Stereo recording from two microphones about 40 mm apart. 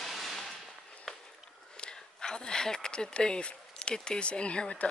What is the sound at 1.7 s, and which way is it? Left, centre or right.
Speech, centre.